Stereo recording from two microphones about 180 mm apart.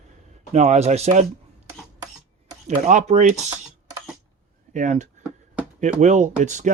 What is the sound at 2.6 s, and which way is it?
Speech, 40° right (ahead or behind).